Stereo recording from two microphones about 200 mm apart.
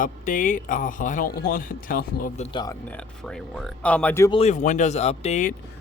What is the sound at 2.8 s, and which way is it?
Speech, 5° left (ahead or behind).